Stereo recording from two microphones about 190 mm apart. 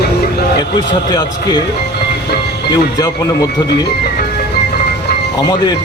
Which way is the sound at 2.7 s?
20° left (ahead or behind).